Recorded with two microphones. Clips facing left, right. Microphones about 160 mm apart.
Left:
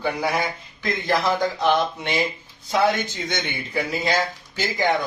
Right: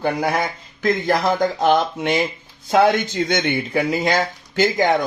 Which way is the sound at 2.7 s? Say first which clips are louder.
Right 5 dB; 65° right (ahead or behind).